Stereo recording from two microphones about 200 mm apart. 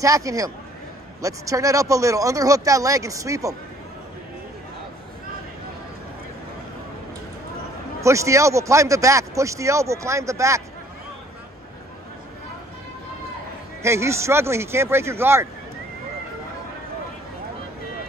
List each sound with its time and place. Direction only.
0.0 s speech: 15° right (ahead or behind)
8.0 s speech: 15° right (ahead or behind)
13.8 s speech: 15° right (ahead or behind)